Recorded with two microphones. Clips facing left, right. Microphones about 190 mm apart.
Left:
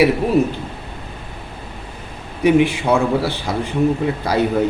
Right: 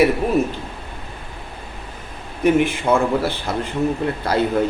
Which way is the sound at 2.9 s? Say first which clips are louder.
Right 1 dB; centre (ahead or behind).